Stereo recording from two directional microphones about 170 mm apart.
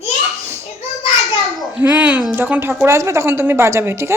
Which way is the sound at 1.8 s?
10° right (ahead or behind).